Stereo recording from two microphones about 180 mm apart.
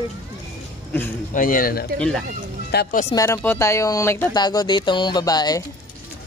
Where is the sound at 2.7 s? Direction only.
65° left (ahead or behind).